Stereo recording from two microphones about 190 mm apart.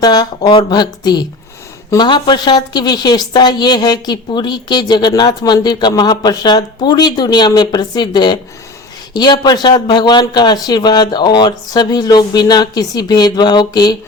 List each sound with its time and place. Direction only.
0.0 s a woman's voice: 20° left (ahead or behind)